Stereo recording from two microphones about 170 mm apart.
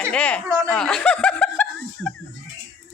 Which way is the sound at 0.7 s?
5° left (ahead or behind).